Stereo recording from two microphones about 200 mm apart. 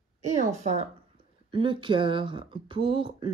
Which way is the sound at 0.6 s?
35° right (ahead or behind).